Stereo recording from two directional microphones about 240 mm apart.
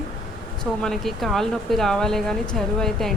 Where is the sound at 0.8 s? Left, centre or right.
Centre.